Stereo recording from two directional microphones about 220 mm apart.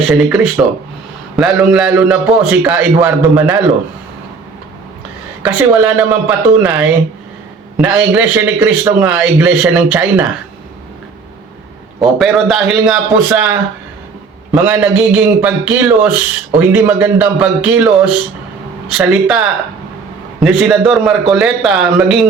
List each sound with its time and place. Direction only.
0.1 s a man's voice: 5° right (ahead or behind)
5.4 s a man's voice: 5° right (ahead or behind)
12.2 s a man's voice: centre (ahead or behind)